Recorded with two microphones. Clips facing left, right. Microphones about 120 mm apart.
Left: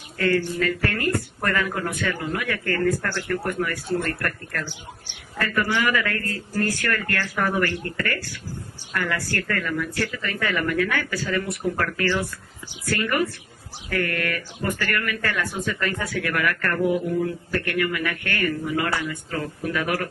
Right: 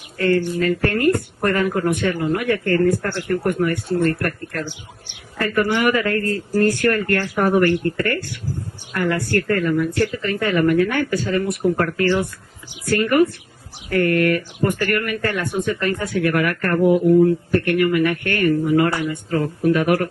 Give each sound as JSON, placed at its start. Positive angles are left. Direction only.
{"t": 0.2, "sound": "speech", "side_deg": -25}
{"t": 3.1, "sound": "speech", "side_deg": -20}
{"t": 4.6, "sound": "speech", "side_deg": -20}
{"t": 19.0, "sound": "speech", "side_deg": -35}